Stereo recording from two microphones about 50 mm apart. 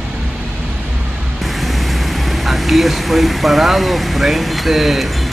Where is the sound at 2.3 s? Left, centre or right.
Centre.